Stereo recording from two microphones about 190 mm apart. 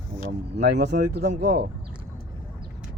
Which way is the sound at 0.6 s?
65° right (ahead or behind).